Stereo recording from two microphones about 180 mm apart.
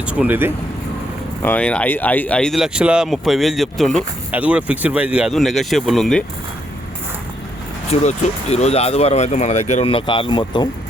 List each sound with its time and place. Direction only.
0.0 s speech: 5° right (ahead or behind)
1.4 s speech: 10° left (ahead or behind)
7.9 s speech: 35° left (ahead or behind)